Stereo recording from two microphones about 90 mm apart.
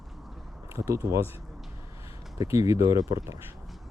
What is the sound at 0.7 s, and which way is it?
Speech, 30° right (ahead or behind).